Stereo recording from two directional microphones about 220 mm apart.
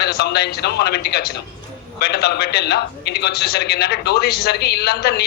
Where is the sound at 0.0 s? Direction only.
45° left (ahead or behind).